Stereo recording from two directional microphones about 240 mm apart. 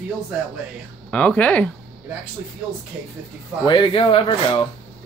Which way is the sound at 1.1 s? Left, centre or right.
Centre.